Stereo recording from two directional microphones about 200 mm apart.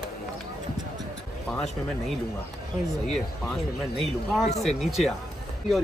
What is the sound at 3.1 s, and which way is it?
Speech, centre (ahead or behind).